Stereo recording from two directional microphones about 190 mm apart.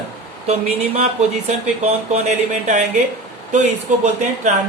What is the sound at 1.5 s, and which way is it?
Speech, 35° right (ahead or behind).